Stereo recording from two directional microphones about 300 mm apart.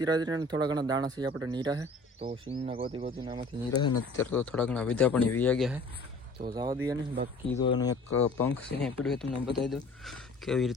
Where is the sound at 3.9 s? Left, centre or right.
Left.